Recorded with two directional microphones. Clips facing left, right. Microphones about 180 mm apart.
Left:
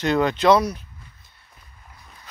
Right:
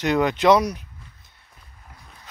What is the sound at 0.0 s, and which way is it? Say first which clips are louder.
Speech: even; 15° right (ahead or behind).